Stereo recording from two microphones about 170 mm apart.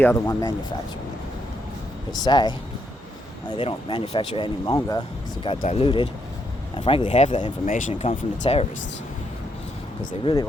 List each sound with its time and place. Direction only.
0.0 s speech: 15° left (ahead or behind)
2.2 s speech: 25° left (ahead or behind)
3.6 s speech: 30° left (ahead or behind)
10.1 s speech: 30° left (ahead or behind)